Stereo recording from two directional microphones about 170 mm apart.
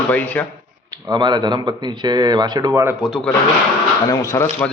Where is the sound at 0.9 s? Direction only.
25° right (ahead or behind).